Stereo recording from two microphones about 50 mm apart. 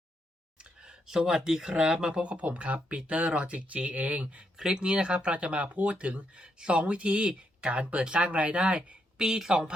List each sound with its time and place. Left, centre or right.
0.6 s speech: centre
4.5 s speech: centre